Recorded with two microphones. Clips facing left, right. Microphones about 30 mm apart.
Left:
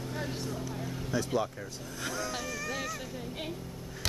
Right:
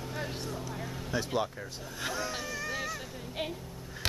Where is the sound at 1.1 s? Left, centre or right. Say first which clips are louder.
Left 1 dB; right.